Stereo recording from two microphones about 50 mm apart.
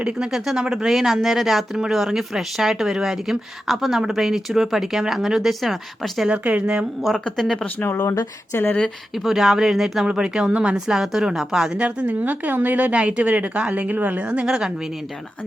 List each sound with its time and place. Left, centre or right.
0.0 s speech: centre
6.2 s a woman's voice: right
7.3 s speech: centre
7.8 s speech: left
9.1 s speech: centre
10.1 s a woman's voice: centre
10.8 s speech: centre
11.9 s a woman's voice: right
14.3 s speech: centre